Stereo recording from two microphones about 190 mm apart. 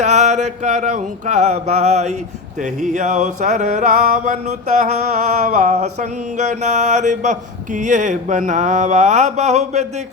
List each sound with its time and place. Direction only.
0.0 s mantra: 40° right (ahead or behind)